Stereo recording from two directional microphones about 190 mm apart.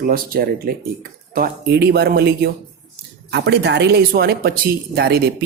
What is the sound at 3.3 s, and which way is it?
A man's voice, 60° right (ahead or behind).